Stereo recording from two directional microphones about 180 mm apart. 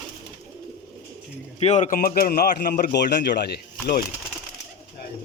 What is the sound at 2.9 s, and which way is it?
Speech, 70° left (ahead or behind).